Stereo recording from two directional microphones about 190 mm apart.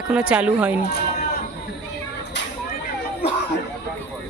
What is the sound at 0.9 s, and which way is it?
Sheep, 60° left (ahead or behind).